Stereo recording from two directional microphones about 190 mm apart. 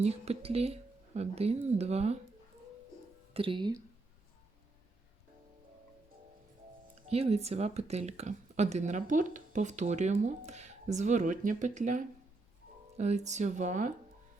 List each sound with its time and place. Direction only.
0.0 s speech: 35° right (ahead or behind)
3.3 s speech: 25° right (ahead or behind)
7.1 s speech: 35° right (ahead or behind)